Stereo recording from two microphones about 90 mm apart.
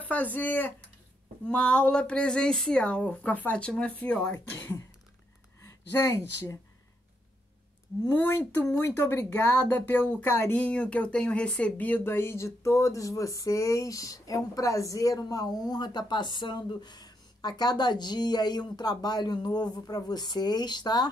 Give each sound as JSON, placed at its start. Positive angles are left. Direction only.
{"t": 0.0, "sound": "speech", "side_deg": 15}
{"t": 5.6, "sound": "speech", "side_deg": 35}
{"t": 8.8, "sound": "speech", "side_deg": 25}